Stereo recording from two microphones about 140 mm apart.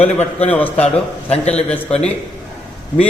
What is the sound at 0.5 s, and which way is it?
Speech, 10° left (ahead or behind).